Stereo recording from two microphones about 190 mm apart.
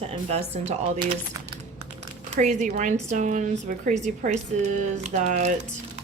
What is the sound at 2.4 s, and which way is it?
A woman's voice, 40° right (ahead or behind).